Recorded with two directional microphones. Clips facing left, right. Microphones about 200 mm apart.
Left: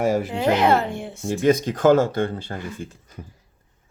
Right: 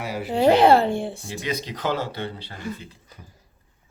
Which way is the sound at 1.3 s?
50° left (ahead or behind).